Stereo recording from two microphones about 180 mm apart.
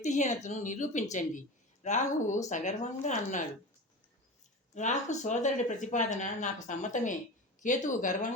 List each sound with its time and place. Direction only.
0.0 s speech: 40° left (ahead or behind)
4.7 s speech: 40° left (ahead or behind)